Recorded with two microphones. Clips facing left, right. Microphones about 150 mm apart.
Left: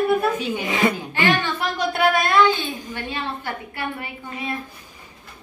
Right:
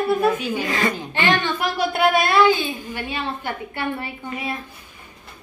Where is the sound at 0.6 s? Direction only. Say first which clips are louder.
Left 1 dB; 15° left (ahead or behind).